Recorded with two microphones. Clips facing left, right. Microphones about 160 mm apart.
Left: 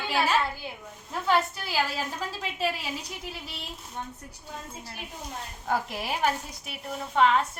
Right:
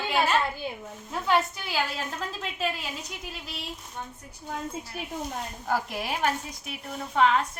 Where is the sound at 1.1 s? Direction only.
Centre (ahead or behind).